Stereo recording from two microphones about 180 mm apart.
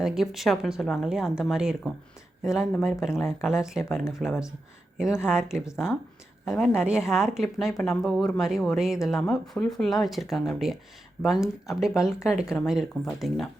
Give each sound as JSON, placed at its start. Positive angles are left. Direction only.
{"t": 0.0, "sound": "speech", "side_deg": 0}
{"t": 4.3, "sound": "speech", "side_deg": 15}
{"t": 5.2, "sound": "speech", "side_deg": -5}